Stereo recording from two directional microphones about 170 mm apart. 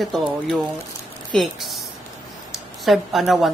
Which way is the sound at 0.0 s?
Centre (ahead or behind).